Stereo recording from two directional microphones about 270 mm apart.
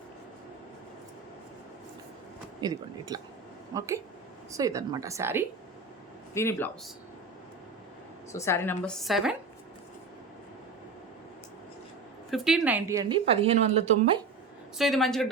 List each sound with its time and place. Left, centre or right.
2.6 s a woman's voice: centre
6.3 s a woman's voice: centre
8.3 s a woman's voice: centre
12.3 s a woman's voice: centre; by 14.2 s right
14.8 s speech: centre